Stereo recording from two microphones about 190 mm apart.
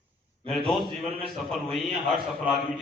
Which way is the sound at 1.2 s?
Centre (ahead or behind).